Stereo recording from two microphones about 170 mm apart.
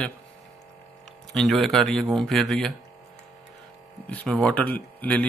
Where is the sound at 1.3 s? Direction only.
Centre (ahead or behind).